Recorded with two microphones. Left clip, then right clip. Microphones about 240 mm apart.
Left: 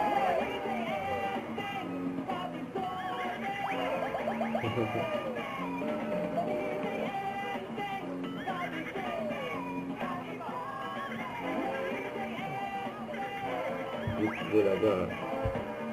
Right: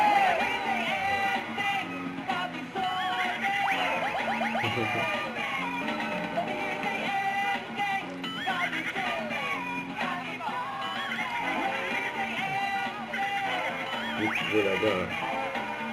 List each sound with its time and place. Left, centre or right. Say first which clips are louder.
0.0 s music: right 6 dB; centre
3.2 s music: right 7 dB; centre
14.2 s music: right 1 dB; centre